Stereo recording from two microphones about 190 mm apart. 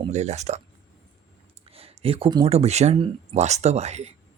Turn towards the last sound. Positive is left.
turn(degrees=-35)  # may be behind; listen again after turning